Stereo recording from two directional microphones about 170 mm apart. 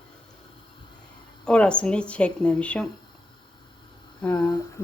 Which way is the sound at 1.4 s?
5° left (ahead or behind).